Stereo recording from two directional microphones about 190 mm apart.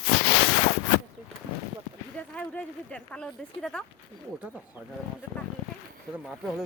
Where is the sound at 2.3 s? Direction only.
5° left (ahead or behind).